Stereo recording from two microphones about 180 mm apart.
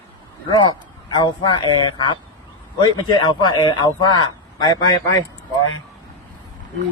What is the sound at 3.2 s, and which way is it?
A man's voice, 25° left (ahead or behind).